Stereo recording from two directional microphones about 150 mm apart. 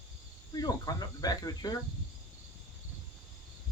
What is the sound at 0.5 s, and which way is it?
Speech, 25° left (ahead or behind).